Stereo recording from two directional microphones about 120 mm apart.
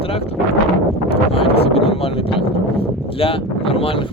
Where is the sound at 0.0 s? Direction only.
55° left (ahead or behind).